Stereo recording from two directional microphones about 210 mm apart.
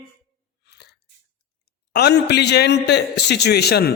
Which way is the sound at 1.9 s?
50° left (ahead or behind).